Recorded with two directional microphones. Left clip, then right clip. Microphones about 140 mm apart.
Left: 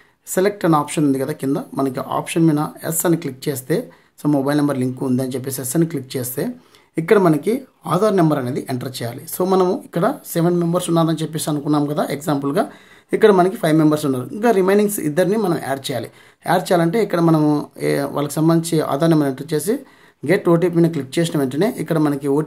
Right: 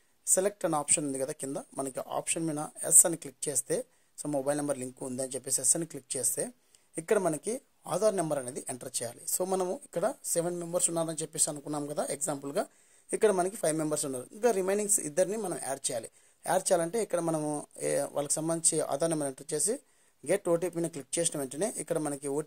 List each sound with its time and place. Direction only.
0.3 s speech: 40° right (ahead or behind)